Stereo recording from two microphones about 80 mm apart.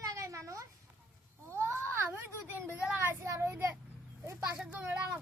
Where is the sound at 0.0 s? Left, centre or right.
Right.